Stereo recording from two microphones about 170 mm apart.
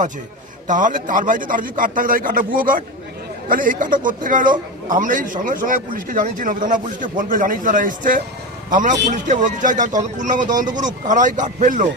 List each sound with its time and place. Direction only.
0.7 s a man's voice: 50° right (ahead or behind)